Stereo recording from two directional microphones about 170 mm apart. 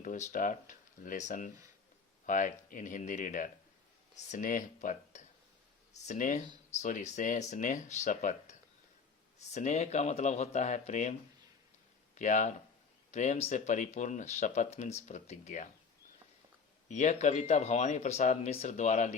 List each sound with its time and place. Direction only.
0.0 s speech: 45° left (ahead or behind)
2.2 s speech: 50° left (ahead or behind)
9.6 s speech: 40° left (ahead or behind)
12.1 s speech: 45° left (ahead or behind)
16.9 s speech: 45° left (ahead or behind)